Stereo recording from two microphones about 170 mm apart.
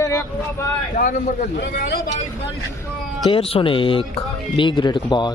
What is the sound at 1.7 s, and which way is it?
Speech, 60° left (ahead or behind).